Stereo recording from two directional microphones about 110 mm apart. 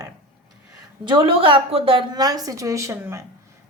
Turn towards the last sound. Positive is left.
turn(degrees=-25)  # may be behind; listen again after turning